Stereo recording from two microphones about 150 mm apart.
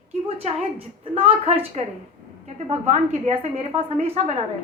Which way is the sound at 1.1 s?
40° right (ahead or behind).